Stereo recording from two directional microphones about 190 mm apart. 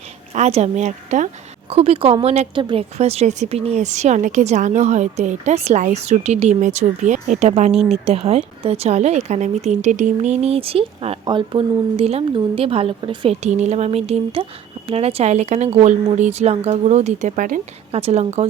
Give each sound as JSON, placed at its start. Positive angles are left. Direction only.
{"t": 0.3, "sound": "speech", "side_deg": -35}